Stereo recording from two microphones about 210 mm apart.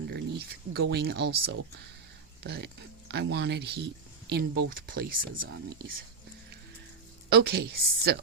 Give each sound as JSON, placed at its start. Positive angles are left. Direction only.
{"t": 0.1, "sound": "speech", "side_deg": -50}
{"t": 7.3, "sound": "speech", "side_deg": -50}